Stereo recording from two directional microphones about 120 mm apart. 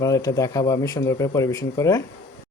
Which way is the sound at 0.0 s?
30° left (ahead or behind).